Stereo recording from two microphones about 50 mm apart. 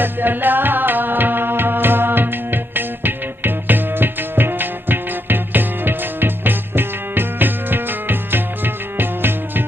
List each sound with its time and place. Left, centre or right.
0.0 s music: right